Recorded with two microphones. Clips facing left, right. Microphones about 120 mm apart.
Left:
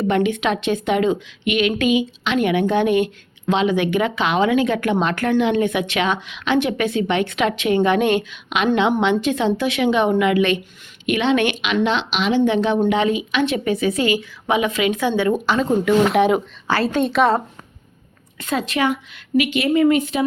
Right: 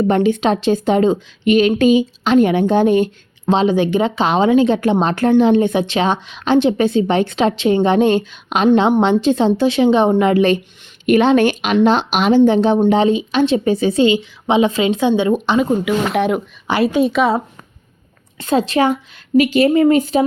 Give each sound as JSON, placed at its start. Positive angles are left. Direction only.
{"t": 0.1, "sound": "a woman's voice", "side_deg": -30}
{"t": 12.5, "sound": "a woman's voice", "side_deg": -30}
{"t": 15.5, "sound": "speech", "side_deg": -5}
{"t": 18.3, "sound": "a woman's voice", "side_deg": -30}